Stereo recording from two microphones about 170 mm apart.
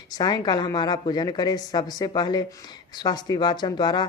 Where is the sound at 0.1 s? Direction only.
25° left (ahead or behind).